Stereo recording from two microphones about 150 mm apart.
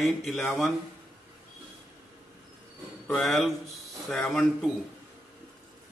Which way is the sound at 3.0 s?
Centre (ahead or behind).